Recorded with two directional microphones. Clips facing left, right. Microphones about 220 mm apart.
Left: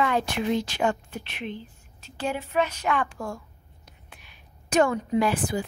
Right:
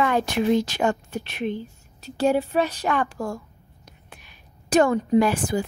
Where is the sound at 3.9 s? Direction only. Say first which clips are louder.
Right 4 dB; 40° right (ahead or behind).